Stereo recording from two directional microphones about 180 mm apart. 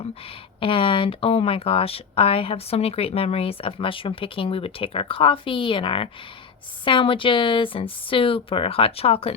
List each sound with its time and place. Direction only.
0.6 s speech: 30° left (ahead or behind)